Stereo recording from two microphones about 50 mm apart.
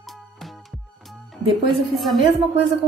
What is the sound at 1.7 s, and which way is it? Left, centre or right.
A woman's voice, centre.